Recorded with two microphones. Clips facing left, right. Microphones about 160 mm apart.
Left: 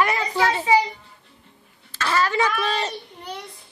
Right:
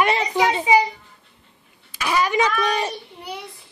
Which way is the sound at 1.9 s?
15° right (ahead or behind).